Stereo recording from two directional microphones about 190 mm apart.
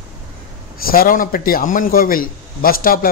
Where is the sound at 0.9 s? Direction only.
50° left (ahead or behind).